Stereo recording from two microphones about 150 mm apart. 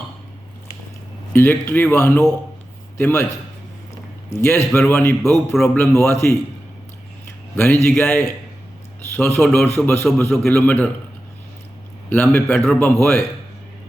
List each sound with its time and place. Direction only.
1.3 s speech: 15° left (ahead or behind)
4.3 s speech: 15° left (ahead or behind)
5.3 s speech: centre (ahead or behind)
5.6 s speech: 15° left (ahead or behind)
7.5 s speech: 15° left (ahead or behind)
9.4 s speech: 5° left (ahead or behind)
9.7 s speech: 15° left (ahead or behind)
12.1 s speech: 10° left (ahead or behind)